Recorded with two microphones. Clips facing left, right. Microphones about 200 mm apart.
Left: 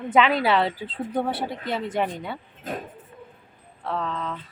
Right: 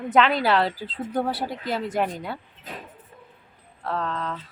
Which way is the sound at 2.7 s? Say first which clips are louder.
Left 7 dB; 50° left (ahead or behind).